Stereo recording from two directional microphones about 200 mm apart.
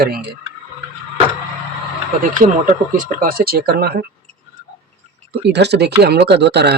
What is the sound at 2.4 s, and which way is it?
Speech, 40° right (ahead or behind).